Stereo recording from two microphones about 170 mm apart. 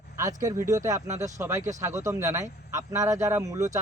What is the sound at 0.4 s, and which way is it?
A man's voice, 15° right (ahead or behind).